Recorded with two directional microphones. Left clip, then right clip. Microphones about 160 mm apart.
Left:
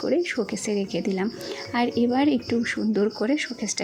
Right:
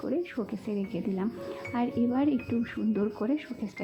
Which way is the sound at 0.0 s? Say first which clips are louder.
Left 8 dB; 25° left (ahead or behind).